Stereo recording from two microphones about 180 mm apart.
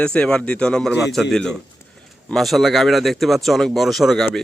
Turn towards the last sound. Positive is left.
turn(degrees=0)  # may be behind; listen again after turning